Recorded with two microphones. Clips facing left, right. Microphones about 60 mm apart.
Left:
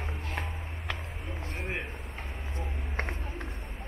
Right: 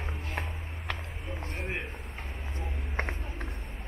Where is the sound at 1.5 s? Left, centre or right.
Centre.